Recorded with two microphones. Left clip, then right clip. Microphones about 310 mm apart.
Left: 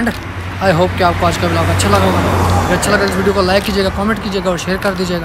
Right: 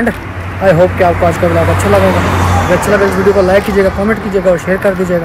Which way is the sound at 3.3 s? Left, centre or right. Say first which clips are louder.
Right 4 dB; centre.